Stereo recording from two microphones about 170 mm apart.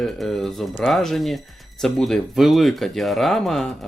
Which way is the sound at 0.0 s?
Centre (ahead or behind).